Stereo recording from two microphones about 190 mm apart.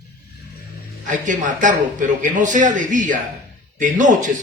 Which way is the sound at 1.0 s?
40° right (ahead or behind).